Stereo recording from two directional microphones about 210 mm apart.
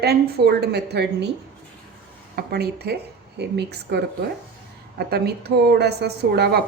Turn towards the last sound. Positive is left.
turn(degrees=-50)  # may be behind; listen again after turning